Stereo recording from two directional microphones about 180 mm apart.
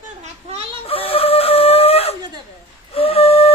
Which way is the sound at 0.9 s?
30° left (ahead or behind).